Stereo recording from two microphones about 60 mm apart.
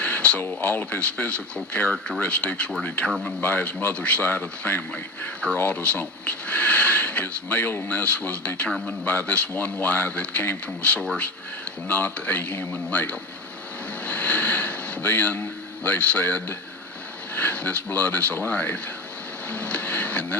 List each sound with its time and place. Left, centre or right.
0.0 s a sound: centre
0.6 s speech: left
9.5 s speech: left
11.9 s speech: left
14.0 s a sound: left
17.3 s speech: left